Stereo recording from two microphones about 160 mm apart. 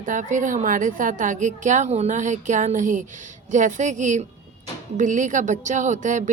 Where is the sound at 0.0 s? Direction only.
55° right (ahead or behind).